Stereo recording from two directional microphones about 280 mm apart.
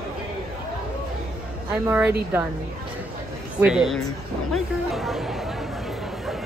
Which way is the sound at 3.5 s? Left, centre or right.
Centre.